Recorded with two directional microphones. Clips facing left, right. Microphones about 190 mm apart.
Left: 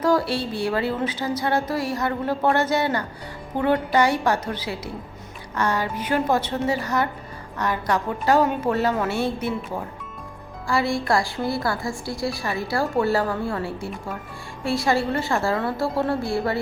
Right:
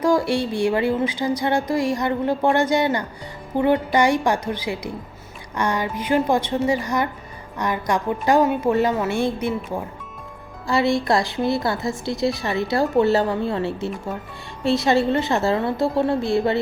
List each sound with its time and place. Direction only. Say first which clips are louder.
0.0 s a woman's voice: right 2 dB; 10° right (ahead or behind)
9.1 s a woman's voice: right 2 dB; 5° left (ahead or behind)
10.7 s a woman's voice: right 3 dB; 20° right (ahead or behind)